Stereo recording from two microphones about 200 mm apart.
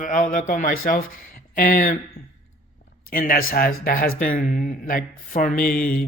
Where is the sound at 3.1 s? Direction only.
45° left (ahead or behind).